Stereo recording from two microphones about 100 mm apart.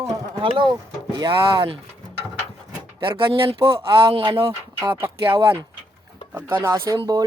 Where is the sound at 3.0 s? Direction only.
55° right (ahead or behind).